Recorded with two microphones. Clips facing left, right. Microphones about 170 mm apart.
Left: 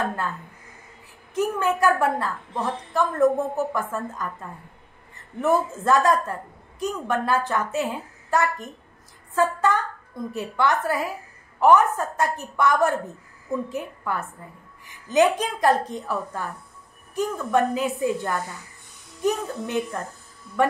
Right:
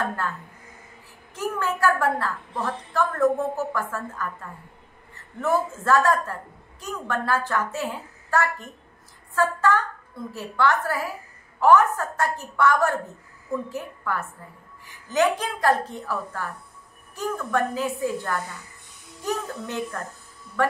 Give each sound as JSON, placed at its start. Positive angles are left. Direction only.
{"t": 1.3, "sound": "a woman's voice", "side_deg": 20}